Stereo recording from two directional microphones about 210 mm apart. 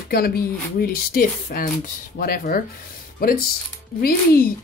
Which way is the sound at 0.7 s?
45° left (ahead or behind).